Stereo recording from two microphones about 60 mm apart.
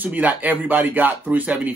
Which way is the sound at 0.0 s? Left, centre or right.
Right.